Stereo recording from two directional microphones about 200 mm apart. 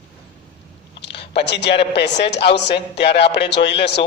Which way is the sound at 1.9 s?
60° left (ahead or behind).